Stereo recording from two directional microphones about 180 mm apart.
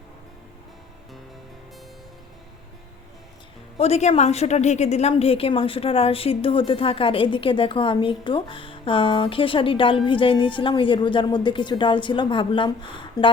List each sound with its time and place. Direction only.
3.8 s a woman's voice: 35° left (ahead or behind)